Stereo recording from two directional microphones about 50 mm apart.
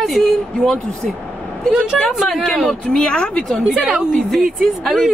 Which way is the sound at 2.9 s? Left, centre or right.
Centre.